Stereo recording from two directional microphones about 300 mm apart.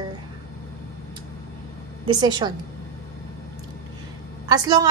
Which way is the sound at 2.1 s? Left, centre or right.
Centre.